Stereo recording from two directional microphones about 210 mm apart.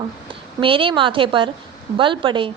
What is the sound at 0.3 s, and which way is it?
A woman's voice, 25° right (ahead or behind).